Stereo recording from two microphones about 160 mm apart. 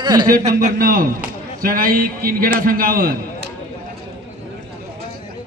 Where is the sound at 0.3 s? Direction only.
60° right (ahead or behind).